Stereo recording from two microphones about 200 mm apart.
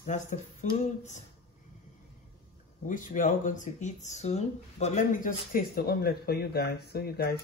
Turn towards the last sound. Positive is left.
turn(degrees=50)  # may be behind; listen again after turning